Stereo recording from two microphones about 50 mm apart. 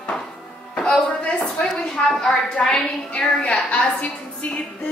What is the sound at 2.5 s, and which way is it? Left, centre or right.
A woman's voice, centre.